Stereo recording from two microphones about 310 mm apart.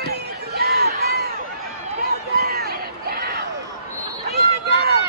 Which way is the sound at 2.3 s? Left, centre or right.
Right.